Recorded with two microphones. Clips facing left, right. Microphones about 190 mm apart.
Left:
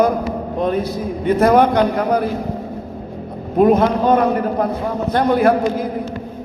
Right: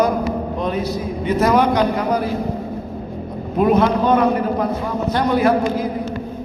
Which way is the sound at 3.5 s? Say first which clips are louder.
Left 2 dB; 45° left (ahead or behind).